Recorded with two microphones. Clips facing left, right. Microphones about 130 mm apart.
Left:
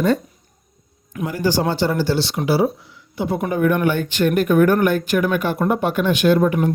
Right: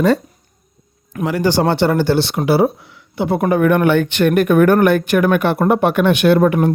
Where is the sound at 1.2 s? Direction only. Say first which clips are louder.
Right 4 dB; 70° right (ahead or behind).